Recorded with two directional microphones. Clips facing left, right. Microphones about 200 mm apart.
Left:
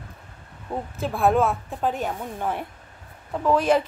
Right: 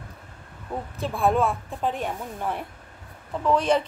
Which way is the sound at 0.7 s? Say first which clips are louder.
Left 2 dB; 25° left (ahead or behind).